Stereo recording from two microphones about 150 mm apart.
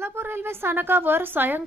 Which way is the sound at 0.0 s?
15° right (ahead or behind).